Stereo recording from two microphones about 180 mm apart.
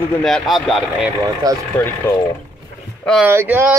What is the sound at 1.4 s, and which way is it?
Speech, 20° right (ahead or behind).